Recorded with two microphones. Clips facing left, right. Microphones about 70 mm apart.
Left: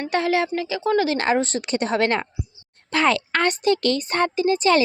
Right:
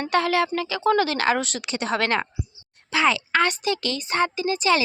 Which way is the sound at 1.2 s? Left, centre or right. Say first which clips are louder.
Left 2 dB; left.